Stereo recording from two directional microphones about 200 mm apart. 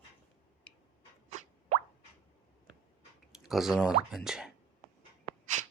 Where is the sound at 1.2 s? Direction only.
35° right (ahead or behind).